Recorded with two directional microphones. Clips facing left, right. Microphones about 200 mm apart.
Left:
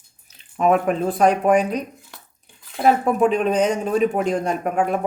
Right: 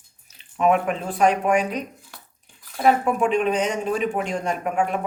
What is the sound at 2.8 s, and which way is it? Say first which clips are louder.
Speech: left 2 dB; 35° left (ahead or behind).